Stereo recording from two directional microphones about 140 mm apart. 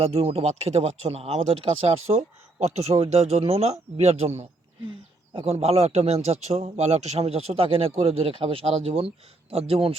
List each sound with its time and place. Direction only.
0.0 s speech: 45° right (ahead or behind)
5.3 s speech: 40° right (ahead or behind)